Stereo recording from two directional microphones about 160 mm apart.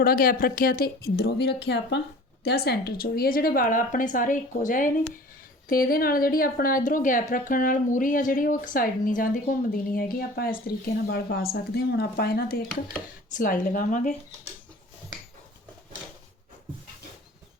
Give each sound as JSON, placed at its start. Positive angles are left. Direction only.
{"t": 0.0, "sound": "speech", "side_deg": 65}
{"t": 5.6, "sound": "speech", "side_deg": 65}
{"t": 13.3, "sound": "a woman's voice", "side_deg": 55}